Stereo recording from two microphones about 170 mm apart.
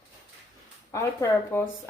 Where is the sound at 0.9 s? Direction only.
20° left (ahead or behind).